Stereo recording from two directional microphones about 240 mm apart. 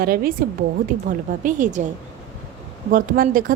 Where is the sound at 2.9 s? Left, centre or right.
Right.